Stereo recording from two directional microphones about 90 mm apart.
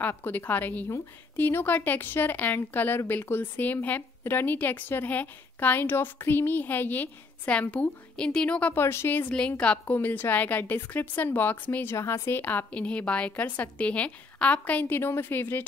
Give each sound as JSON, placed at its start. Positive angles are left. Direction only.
{"t": 0.0, "sound": "a woman's voice", "side_deg": 25}
{"t": 8.8, "sound": "a woman's voice", "side_deg": 25}
{"t": 9.6, "sound": "a woman's voice", "side_deg": 15}
{"t": 9.9, "sound": "a woman's voice", "side_deg": 25}